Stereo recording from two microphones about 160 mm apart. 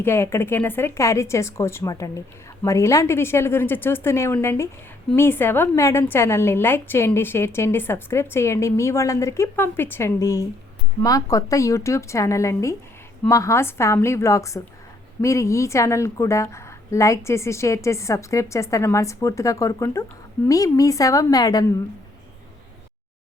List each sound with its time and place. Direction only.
0.0 s a woman's voice: 15° left (ahead or behind)